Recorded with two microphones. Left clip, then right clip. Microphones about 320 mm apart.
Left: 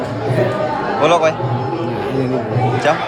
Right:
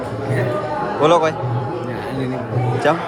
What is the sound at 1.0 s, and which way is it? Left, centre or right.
Speech, centre.